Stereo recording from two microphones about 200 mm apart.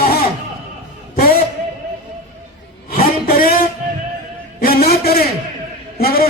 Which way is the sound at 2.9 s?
45° left (ahead or behind).